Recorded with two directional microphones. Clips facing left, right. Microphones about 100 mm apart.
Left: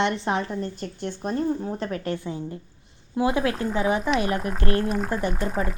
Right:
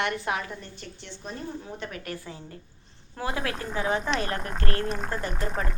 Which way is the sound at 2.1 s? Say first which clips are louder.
Left 9 dB; 20° left (ahead or behind).